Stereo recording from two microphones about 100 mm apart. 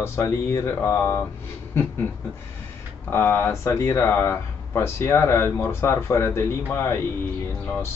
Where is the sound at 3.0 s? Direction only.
25° left (ahead or behind).